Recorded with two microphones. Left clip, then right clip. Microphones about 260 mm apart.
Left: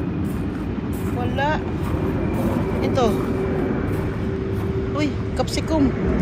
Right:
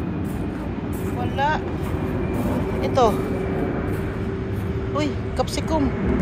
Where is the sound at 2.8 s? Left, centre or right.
Centre.